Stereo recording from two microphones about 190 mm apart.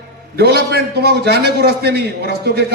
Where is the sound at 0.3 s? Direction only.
60° right (ahead or behind).